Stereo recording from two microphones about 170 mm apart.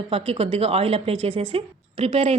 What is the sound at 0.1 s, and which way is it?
A woman's voice, 35° right (ahead or behind).